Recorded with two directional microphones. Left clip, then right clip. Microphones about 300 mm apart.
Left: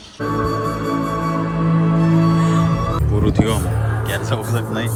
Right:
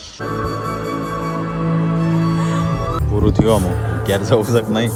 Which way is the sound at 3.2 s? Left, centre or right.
Right.